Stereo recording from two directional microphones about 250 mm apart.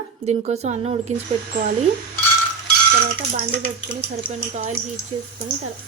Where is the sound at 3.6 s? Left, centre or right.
Right.